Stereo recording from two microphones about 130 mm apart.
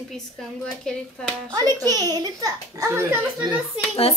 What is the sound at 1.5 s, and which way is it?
A child's voice, 30° right (ahead or behind).